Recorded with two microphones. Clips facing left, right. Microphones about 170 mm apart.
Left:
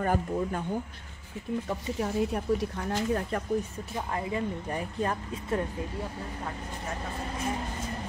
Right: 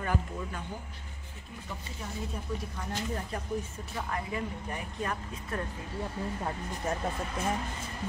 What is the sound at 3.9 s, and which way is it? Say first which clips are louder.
Speech: left 3 dB; 30° left (ahead or behind).